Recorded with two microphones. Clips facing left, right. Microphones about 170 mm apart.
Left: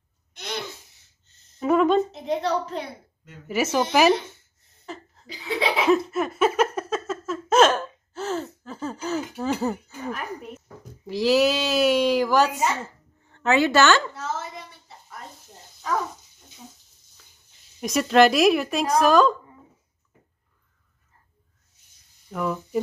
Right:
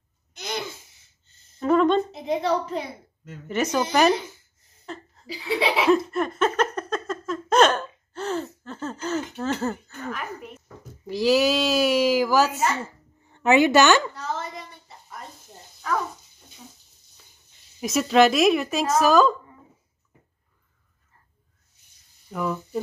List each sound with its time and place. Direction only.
0.4 s a sound: centre (ahead or behind)
1.6 s a woman's voice: 5° left (ahead or behind)
4.8 s laughter: centre (ahead or behind)
11.1 s a woman's voice: centre (ahead or behind)
13.3 s a woman's voice: 15° right (ahead or behind)
14.1 s a sound: 5° left (ahead or behind)
17.7 s a woman's voice: centre (ahead or behind)
22.3 s a woman's voice: centre (ahead or behind)